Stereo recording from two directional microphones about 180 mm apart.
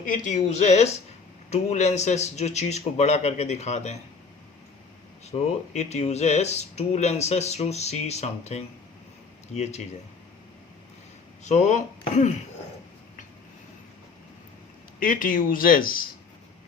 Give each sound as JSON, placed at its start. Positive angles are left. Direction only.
{"t": 0.0, "sound": "speech", "side_deg": 45}
{"t": 5.3, "sound": "speech", "side_deg": 40}
{"t": 11.4, "sound": "speech", "side_deg": 40}
{"t": 14.9, "sound": "speech", "side_deg": 50}